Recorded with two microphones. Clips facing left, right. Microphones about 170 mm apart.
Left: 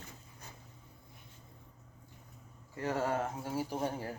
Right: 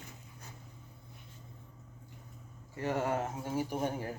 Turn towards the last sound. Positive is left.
turn(degrees=-15)  # may be behind; listen again after turning